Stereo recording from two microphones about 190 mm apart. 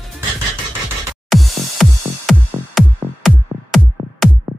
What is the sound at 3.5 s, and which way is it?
Music, 15° right (ahead or behind).